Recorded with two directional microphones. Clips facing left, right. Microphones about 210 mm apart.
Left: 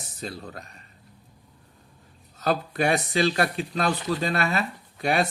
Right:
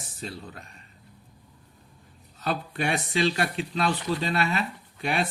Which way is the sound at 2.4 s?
40° left (ahead or behind).